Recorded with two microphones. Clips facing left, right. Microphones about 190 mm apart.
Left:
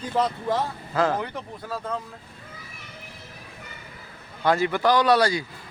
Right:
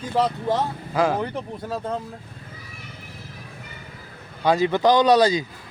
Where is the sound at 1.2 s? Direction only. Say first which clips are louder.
Right 5 dB; 30° right (ahead or behind).